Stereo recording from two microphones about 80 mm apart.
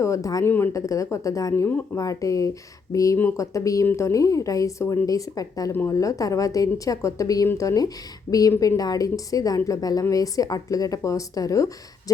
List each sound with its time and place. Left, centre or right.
0.0 s a woman's voice: left
0.4 s speech: left
0.7 s a woman's voice: left